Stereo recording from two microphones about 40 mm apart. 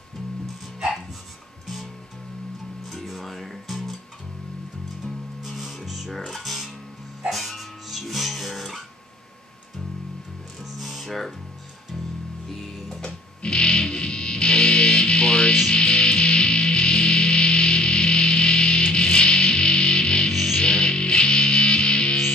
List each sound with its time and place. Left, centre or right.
2.9 s music: centre
5.0 s music: centre
10.6 s music: centre
13.4 s music: left